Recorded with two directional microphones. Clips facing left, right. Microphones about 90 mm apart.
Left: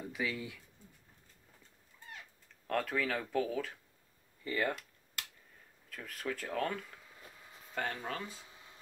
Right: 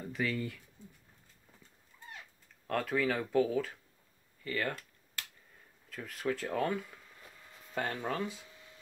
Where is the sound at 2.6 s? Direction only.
Centre (ahead or behind).